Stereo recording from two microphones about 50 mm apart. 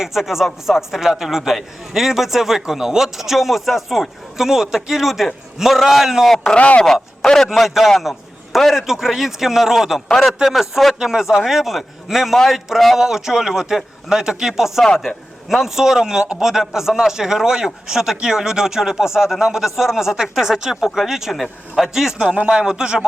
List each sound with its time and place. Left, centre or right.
0.0 s a man's voice: centre
6.4 s speech: left
6.8 s a man's voice: centre
7.5 s a man's voice: centre
21.9 s a man's voice: centre
22.3 s a man's voice: right